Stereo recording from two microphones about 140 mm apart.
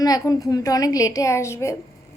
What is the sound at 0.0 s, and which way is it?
Speech, 25° left (ahead or behind).